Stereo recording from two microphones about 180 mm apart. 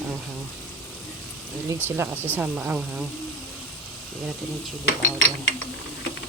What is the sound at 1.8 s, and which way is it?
Speech, 10° right (ahead or behind).